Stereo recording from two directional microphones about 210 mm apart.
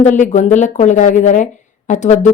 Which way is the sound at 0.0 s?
35° left (ahead or behind).